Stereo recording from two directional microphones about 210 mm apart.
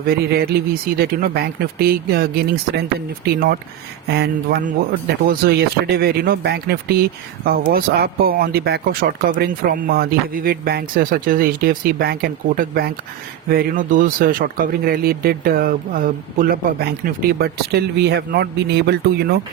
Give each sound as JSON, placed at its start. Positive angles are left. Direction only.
{"t": 0.1, "sound": "speech", "side_deg": -50}